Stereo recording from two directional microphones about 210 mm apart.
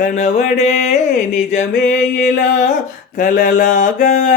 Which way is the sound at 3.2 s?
40° left (ahead or behind).